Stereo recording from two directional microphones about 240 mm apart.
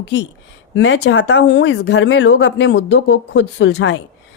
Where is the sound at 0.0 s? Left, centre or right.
Left.